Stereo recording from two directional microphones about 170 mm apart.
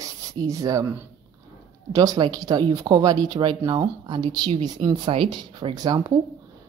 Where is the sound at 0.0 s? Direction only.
20° right (ahead or behind).